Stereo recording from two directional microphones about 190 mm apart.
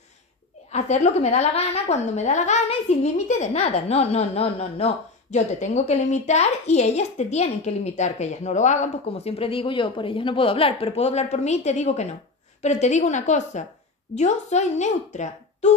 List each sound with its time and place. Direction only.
0.7 s a woman's voice: 35° left (ahead or behind)